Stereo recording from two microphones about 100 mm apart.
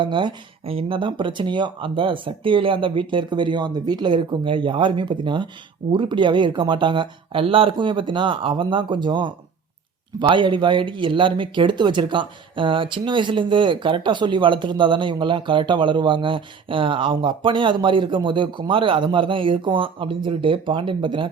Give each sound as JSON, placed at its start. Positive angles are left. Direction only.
{"t": 0.0, "sound": "speech", "side_deg": -50}
{"t": 0.6, "sound": "speech", "side_deg": -70}